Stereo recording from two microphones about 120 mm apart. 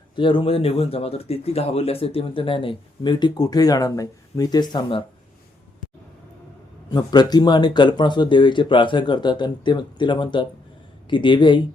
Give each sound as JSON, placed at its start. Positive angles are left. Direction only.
{"t": 0.2, "sound": "speech", "side_deg": 45}
{"t": 6.9, "sound": "speech", "side_deg": 35}